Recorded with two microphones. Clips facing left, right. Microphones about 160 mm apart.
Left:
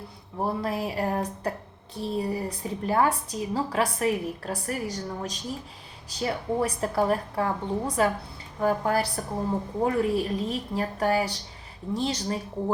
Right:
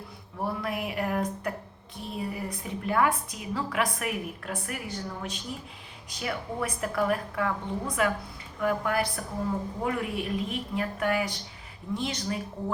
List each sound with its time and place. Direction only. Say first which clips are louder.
0.3 s a woman's voice: left 3 dB; 30° left (ahead or behind)